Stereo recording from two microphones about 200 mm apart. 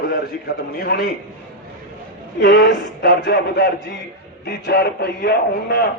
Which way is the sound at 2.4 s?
50° left (ahead or behind).